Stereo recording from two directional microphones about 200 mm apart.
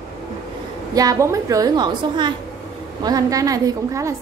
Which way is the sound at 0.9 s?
20° right (ahead or behind).